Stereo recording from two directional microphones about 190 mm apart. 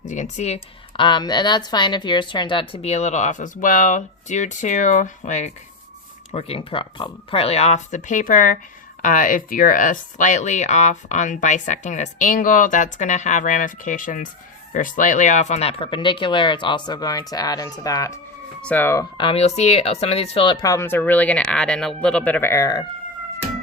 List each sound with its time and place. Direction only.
0.0 s a woman's voice: 40° left (ahead or behind); by 19.0 s 10° left (ahead or behind)
19.1 s speech: 25° left (ahead or behind)